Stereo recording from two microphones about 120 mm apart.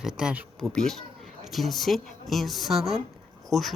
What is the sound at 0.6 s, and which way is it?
Speech, 5° left (ahead or behind).